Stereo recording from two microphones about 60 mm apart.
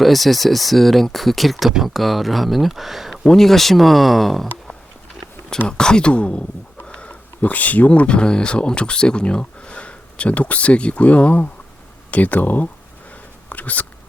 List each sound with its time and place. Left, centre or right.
0.0 s speech: centre
5.6 s speech: centre; by 12.6 s left
13.5 s a sound: left